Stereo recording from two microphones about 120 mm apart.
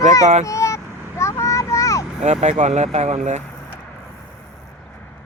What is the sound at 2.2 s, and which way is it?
Speech, 70° right (ahead or behind).